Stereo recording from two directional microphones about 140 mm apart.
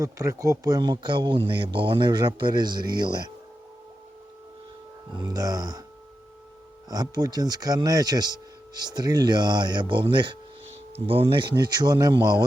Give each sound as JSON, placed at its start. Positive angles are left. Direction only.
{"t": 0.0, "sound": "speech", "side_deg": -25}
{"t": 5.1, "sound": "speech", "side_deg": -30}
{"t": 6.9, "sound": "speech", "side_deg": -30}